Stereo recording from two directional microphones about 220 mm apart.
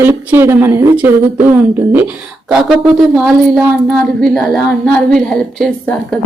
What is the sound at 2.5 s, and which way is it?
Child singing, 5° right (ahead or behind).